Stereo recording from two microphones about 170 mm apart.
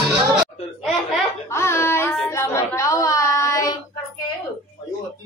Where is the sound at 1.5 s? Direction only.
15° left (ahead or behind).